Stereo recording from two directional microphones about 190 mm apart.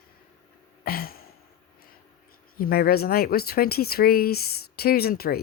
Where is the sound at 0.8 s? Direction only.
50° left (ahead or behind).